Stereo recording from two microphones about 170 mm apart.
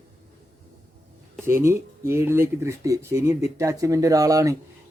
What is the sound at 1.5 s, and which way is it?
Speech, 15° right (ahead or behind).